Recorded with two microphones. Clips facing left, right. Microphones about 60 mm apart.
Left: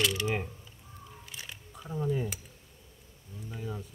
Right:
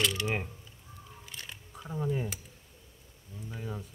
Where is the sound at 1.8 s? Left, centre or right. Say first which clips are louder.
Left 1 dB; centre.